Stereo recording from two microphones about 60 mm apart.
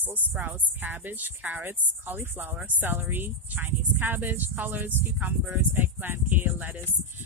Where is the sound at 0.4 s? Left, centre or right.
Right.